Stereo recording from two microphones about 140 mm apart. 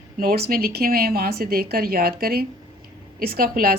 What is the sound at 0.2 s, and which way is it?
A woman's voice, 90° right.